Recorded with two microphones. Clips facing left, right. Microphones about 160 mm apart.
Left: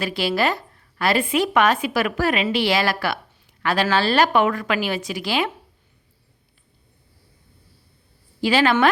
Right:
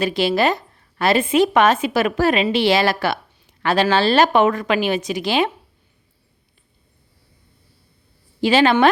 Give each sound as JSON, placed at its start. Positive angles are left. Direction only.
{"t": 0.0, "sound": "speech", "side_deg": -20}
{"t": 8.4, "sound": "speech", "side_deg": -25}